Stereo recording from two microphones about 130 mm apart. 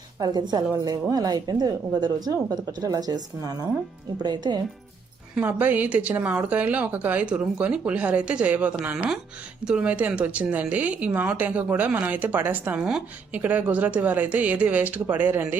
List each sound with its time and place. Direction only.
0.2 s a woman's voice: 30° right (ahead or behind)
5.3 s speech: 15° right (ahead or behind)